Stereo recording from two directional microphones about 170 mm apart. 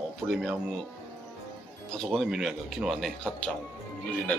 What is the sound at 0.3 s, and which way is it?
Speech, centre (ahead or behind).